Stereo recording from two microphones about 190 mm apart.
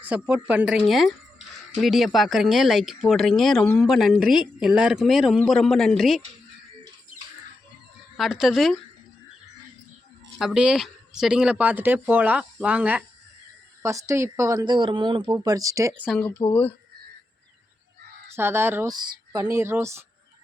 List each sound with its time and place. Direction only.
0.0 s speech: 5° right (ahead or behind)
8.1 s speech: centre (ahead or behind)
10.3 s speech: 5° right (ahead or behind)
16.5 s speech: 10° left (ahead or behind)
18.3 s speech: 10° right (ahead or behind)